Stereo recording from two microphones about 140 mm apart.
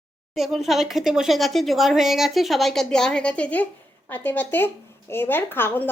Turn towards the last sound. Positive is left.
turn(degrees=15)  # may be behind; listen again after turning